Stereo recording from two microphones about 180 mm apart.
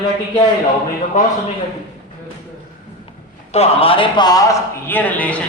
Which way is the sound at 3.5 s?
35° left (ahead or behind).